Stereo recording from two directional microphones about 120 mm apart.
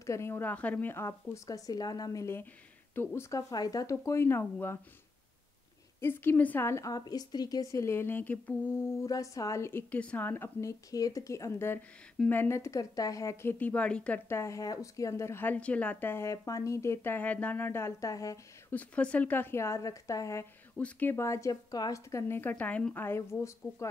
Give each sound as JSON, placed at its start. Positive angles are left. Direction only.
{"t": 0.0, "sound": "speech", "side_deg": 25}
{"t": 5.9, "sound": "speech", "side_deg": 20}
{"t": 9.0, "sound": "speech", "side_deg": 30}
{"t": 14.3, "sound": "speech", "side_deg": 25}
{"t": 18.7, "sound": "speech", "side_deg": 10}
{"t": 20.7, "sound": "speech", "side_deg": 10}